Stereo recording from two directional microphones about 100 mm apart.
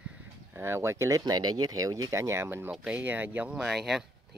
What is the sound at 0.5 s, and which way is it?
Speech, 25° right (ahead or behind).